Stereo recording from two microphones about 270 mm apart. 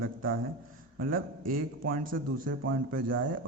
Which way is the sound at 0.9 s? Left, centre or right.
Right.